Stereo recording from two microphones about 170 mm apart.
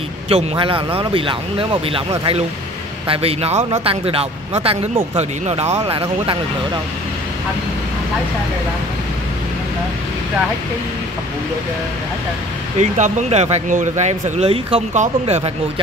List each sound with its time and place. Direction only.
0.3 s speech: 35° right (ahead or behind)
12.9 s speech: 45° right (ahead or behind)